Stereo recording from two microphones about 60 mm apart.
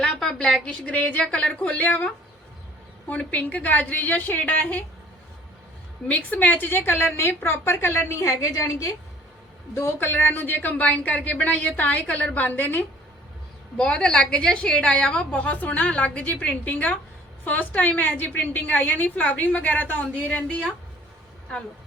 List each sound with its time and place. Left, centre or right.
0.0 s a sound: centre
0.6 s a woman's voice: centre
3.1 s a woman's voice: left
6.1 s a woman's voice: left
9.7 s a woman's voice: left
13.7 s a woman's voice: centre